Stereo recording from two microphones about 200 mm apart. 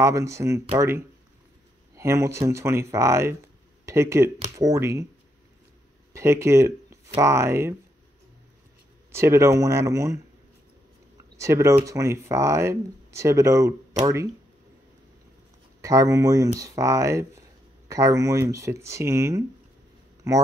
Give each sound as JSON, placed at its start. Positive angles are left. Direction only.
{"t": 0.0, "sound": "speech", "side_deg": -15}
{"t": 6.1, "sound": "speech", "side_deg": -15}
{"t": 9.1, "sound": "speech", "side_deg": -15}
{"t": 11.3, "sound": "speech", "side_deg": -15}
{"t": 15.8, "sound": "speech", "side_deg": -15}